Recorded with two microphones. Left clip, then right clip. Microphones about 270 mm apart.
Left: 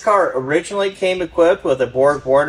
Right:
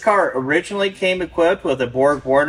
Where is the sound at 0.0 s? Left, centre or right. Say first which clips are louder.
Left 1 dB; centre.